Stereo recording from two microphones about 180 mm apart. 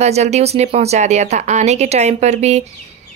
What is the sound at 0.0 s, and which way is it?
Speech, 35° right (ahead or behind).